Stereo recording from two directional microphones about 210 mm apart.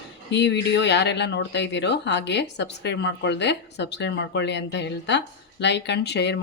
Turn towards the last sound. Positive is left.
turn(degrees=55)  # may be behind; listen again after turning